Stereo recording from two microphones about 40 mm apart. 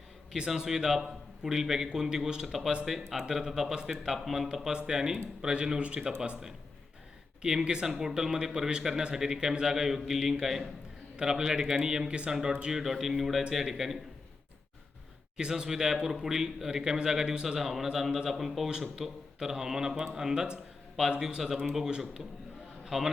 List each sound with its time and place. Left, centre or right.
0.3 s a man's voice: centre
7.6 s speech: centre
12.0 s a man's voice: right
12.3 s a man's voice: centre
12.8 s speech: centre
15.4 s a man's voice: centre
22.9 s a man's voice: centre